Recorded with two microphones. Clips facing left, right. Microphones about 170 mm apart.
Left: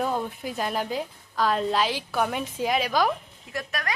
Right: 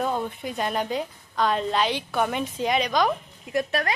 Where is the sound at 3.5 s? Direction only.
25° right (ahead or behind).